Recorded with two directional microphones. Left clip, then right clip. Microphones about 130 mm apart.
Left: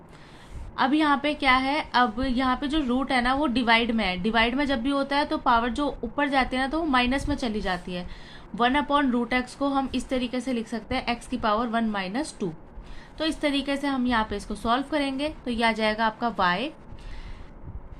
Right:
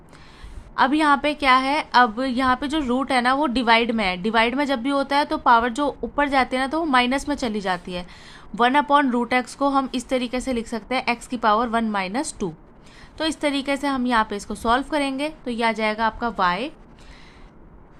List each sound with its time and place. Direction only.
0.8 s a woman's voice: 40° right (ahead or behind)